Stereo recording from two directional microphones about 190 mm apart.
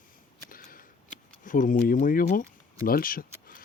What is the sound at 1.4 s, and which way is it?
Speech, 45° left (ahead or behind).